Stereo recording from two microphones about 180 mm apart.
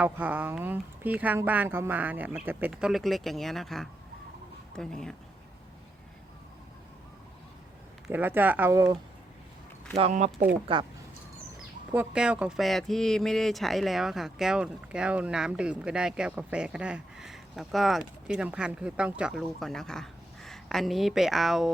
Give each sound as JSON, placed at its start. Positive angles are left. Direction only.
{"t": 0.0, "sound": "speech", "side_deg": -10}
{"t": 8.0, "sound": "speech", "side_deg": -10}
{"t": 9.9, "sound": "speech", "side_deg": -40}
{"t": 10.7, "sound": "speech", "side_deg": -30}
{"t": 11.9, "sound": "speech", "side_deg": -5}